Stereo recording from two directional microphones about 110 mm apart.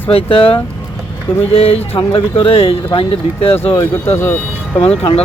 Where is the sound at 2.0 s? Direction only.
50° left (ahead or behind).